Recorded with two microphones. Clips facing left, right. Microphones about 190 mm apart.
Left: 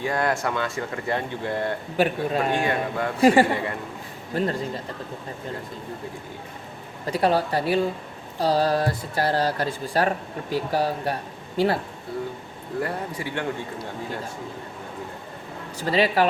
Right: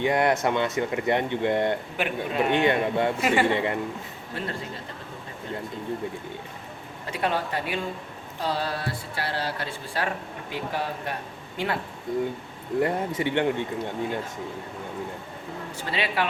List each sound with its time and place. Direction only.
0.0 s speech: 20° right (ahead or behind)
2.0 s speech: 35° left (ahead or behind)
2.5 s speech: 25° right (ahead or behind)
3.2 s speech: 35° left (ahead or behind)
3.5 s speech: 20° right (ahead or behind)
4.4 s speech: 40° left (ahead or behind)
7.0 s speech: 35° left (ahead or behind)
12.8 s speech: 20° right (ahead or behind)
15.8 s speech: 40° left (ahead or behind)